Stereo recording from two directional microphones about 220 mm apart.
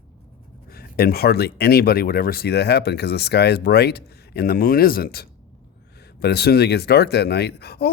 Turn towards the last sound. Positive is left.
turn(degrees=45)  # may be behind; listen again after turning